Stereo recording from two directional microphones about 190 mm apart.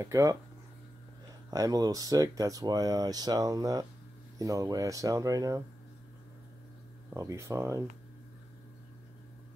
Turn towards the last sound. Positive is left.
turn(degrees=-15)  # may be behind; listen again after turning